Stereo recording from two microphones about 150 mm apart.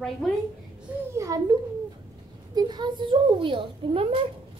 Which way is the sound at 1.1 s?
20° right (ahead or behind).